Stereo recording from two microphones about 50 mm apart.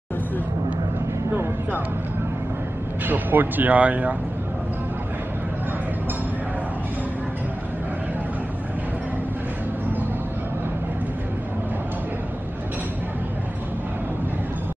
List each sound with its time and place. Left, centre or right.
3.1 s speech: right